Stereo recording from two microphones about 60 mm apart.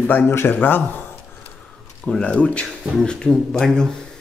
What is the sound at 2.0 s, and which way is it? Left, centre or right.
Speech, centre.